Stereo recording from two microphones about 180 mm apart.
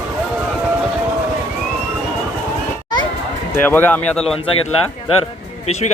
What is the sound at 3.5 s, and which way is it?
Speech, 10° left (ahead or behind).